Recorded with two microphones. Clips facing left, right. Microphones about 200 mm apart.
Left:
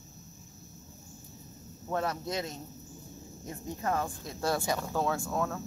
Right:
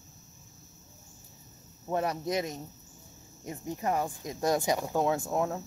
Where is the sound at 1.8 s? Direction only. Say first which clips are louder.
Right 2 dB; 15° right (ahead or behind).